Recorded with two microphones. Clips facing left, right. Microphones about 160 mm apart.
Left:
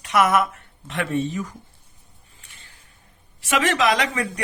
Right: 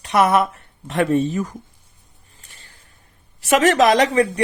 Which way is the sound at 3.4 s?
40° right (ahead or behind).